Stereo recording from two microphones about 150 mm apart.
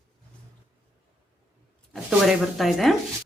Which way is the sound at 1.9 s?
Centre (ahead or behind).